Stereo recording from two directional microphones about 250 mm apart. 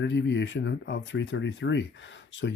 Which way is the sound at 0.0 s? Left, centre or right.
Left.